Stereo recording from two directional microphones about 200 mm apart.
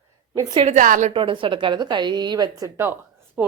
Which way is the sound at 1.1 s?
25° right (ahead or behind).